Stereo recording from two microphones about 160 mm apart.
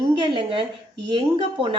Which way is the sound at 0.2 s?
30° right (ahead or behind).